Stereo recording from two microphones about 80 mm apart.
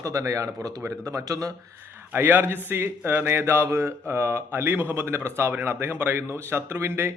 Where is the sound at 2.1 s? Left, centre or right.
Right.